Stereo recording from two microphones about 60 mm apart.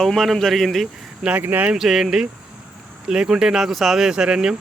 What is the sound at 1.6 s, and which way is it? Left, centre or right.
Speech, centre.